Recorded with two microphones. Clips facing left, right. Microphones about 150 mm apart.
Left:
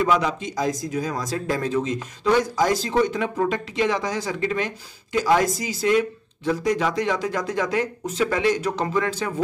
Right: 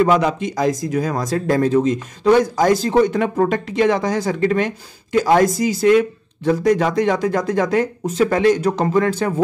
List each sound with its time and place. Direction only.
0.0 s speech: 55° right (ahead or behind)